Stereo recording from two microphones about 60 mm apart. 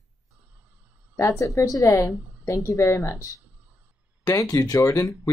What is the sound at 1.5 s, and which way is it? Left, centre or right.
A woman's voice, left.